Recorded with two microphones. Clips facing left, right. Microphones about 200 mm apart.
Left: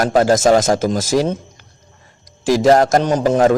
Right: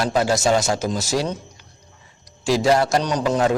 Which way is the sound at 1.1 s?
45° left (ahead or behind).